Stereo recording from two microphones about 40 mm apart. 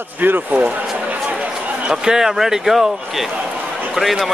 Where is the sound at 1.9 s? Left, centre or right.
Centre.